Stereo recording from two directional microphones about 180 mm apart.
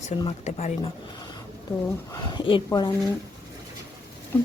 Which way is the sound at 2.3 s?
25° left (ahead or behind).